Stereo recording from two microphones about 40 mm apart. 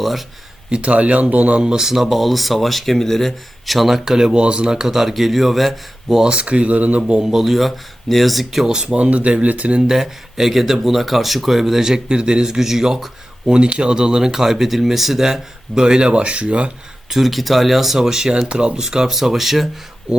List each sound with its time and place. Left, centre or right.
0.0 s speech: centre
0.7 s speech: right
1.6 s speech: centre
4.3 s speech: right; by 6.2 s centre
6.2 s speech: right
7.1 s speech: centre
7.4 s speech: centre
8.4 s speech: centre
9.0 s speech: right
9.8 s speech: centre
13.5 s speech: right
17.1 s speech: centre
20.1 s speech: right